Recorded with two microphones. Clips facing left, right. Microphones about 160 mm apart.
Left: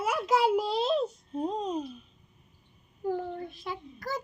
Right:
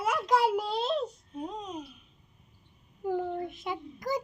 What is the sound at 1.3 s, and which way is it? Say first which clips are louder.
Babbling: left 6 dB; 30° left (ahead or behind).